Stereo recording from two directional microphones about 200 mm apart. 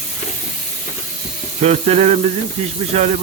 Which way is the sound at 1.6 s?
30° right (ahead or behind).